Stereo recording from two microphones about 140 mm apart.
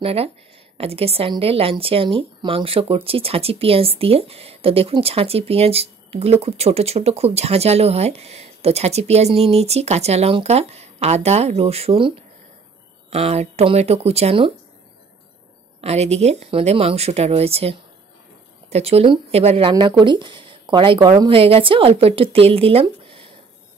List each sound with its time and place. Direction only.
0.0 s speech: 45° right (ahead or behind)
13.1 s speech: 45° right (ahead or behind)
15.8 s speech: 50° right (ahead or behind)
19.7 s speech: 30° right (ahead or behind)